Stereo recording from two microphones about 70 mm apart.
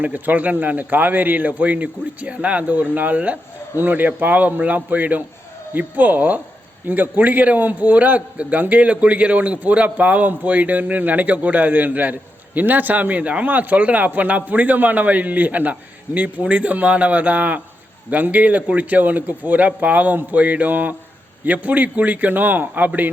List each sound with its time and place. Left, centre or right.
0.0 s a man's voice: right